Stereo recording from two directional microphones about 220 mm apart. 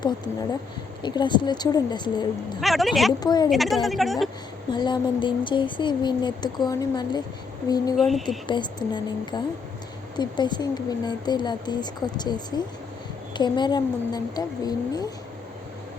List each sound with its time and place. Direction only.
1.0 s speech: 20° left (ahead or behind)
2.6 s a woman's voice: centre (ahead or behind)
3.1 s speech: 15° left (ahead or behind)
3.5 s a woman's voice: centre (ahead or behind)
4.7 s speech: 20° left (ahead or behind)
7.9 s a woman's voice: centre (ahead or behind)
8.4 s speech: 20° left (ahead or behind)